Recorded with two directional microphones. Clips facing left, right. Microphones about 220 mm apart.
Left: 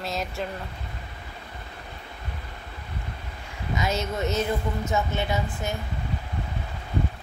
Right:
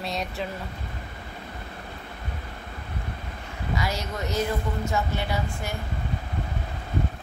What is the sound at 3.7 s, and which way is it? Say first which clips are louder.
Speech: left 3 dB; 20° left (ahead or behind).